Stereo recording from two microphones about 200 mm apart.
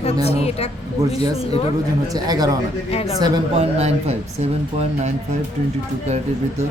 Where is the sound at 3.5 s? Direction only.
30° right (ahead or behind).